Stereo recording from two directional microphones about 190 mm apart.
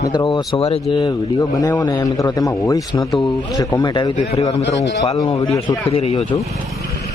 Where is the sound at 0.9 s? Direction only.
20° left (ahead or behind).